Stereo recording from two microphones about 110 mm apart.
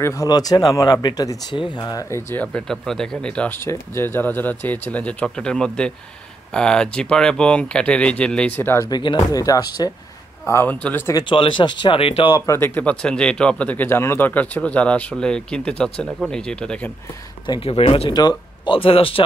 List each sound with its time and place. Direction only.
0.0 s speech: 30° left (ahead or behind)
2.4 s speech: 5° left (ahead or behind)
3.6 s speech: 20° left (ahead or behind)
8.8 s speech: 45° left (ahead or behind)
10.4 s speech: 20° left (ahead or behind)
11.1 s speech: 50° left (ahead or behind)
12.4 s speech: 20° left (ahead or behind)
17.6 s speech: 60° left (ahead or behind)
18.1 s speech: 45° left (ahead or behind)